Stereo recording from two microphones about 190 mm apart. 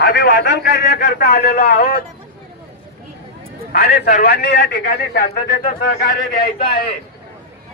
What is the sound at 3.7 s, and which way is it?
A man's voice, 55° left (ahead or behind).